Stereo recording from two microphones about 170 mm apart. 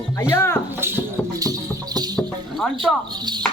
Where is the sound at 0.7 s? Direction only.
15° right (ahead or behind).